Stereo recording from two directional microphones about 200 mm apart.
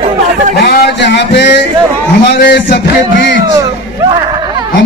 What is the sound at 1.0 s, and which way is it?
Speech, 60° left (ahead or behind).